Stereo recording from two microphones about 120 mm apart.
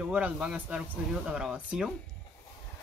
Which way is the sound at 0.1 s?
10° right (ahead or behind).